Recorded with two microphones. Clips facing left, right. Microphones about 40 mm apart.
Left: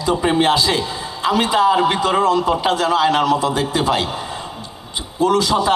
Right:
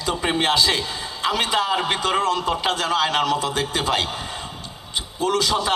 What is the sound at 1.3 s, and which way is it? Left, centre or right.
A man's voice, left.